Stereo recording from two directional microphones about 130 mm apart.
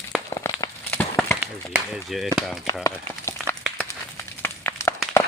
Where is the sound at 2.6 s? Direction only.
20° left (ahead or behind).